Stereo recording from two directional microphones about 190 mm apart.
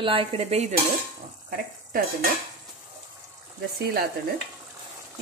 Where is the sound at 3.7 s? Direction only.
55° right (ahead or behind).